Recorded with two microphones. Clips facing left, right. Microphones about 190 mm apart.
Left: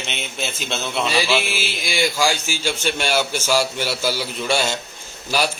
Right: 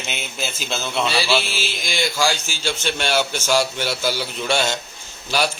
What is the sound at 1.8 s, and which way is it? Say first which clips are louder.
A man's voice: left 1 dB; 10° left (ahead or behind).